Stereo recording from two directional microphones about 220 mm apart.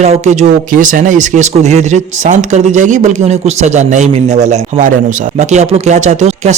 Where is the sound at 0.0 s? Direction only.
30° right (ahead or behind).